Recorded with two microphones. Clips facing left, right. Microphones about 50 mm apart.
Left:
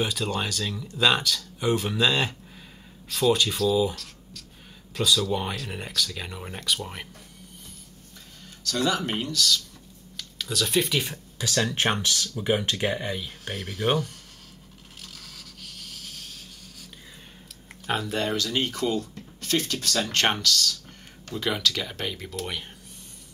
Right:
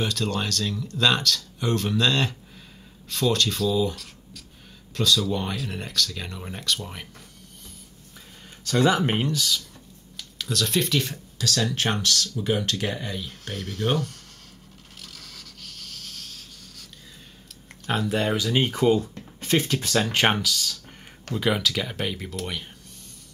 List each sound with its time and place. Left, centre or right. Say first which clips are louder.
0.0 s speech: right 1 dB; centre
3.9 s writing: even; centre
4.9 s speech: right 1 dB; centre
8.6 s speech: right 5 dB; right
10.1 s speech: right 1 dB; centre
15.0 s a sound: right 1 dB; centre
17.5 s speech: right 1 dB; centre